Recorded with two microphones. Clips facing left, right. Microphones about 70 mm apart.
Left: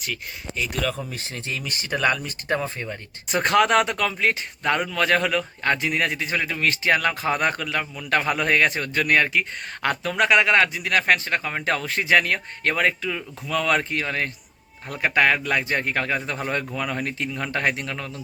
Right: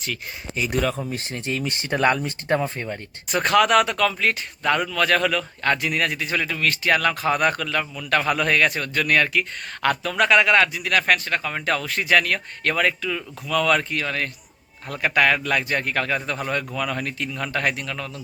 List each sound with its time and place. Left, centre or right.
0.7 s speech: right
3.2 s speech: left